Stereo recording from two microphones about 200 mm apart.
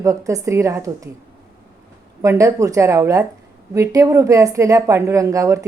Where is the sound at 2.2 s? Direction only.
15° right (ahead or behind).